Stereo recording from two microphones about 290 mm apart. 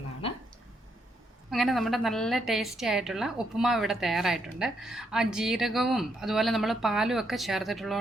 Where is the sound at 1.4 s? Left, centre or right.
Centre.